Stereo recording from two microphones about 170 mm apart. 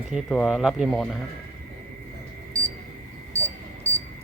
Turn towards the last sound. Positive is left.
turn(degrees=-15)  # may be behind; listen again after turning